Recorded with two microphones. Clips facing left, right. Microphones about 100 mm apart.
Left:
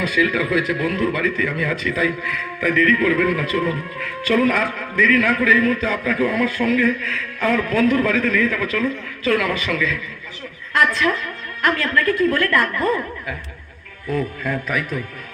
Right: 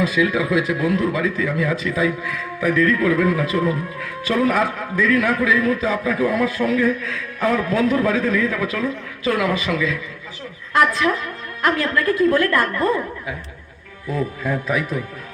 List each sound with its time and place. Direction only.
0.1 s a man's voice: 5° right (ahead or behind)
11.7 s a man's voice: 15° right (ahead or behind)
14.1 s a man's voice: 15° right (ahead or behind)